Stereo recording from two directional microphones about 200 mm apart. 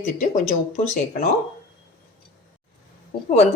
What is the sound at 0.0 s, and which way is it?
Speech, 40° left (ahead or behind).